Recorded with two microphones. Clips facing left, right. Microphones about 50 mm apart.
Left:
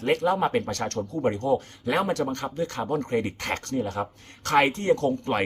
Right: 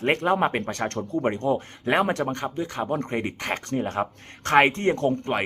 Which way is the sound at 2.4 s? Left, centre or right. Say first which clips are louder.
Right 1 dB; centre.